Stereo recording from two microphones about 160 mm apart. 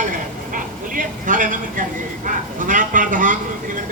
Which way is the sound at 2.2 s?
55° right (ahead or behind).